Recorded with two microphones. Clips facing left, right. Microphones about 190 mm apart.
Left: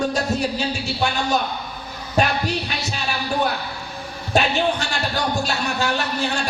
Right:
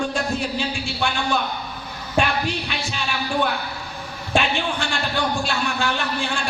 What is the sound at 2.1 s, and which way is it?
Music, 40° left (ahead or behind).